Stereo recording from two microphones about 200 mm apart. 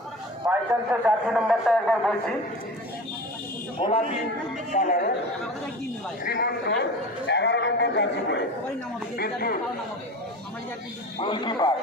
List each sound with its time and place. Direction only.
0.7 s a man's voice: 5° right (ahead or behind)
3.8 s speech: 30° left (ahead or behind)
4.7 s speech: 45° left (ahead or behind)
6.2 s a man's voice: 50° left (ahead or behind)
11.2 s speech: 25° left (ahead or behind)